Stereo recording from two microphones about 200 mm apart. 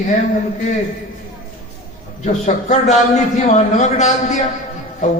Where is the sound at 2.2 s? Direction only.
35° left (ahead or behind).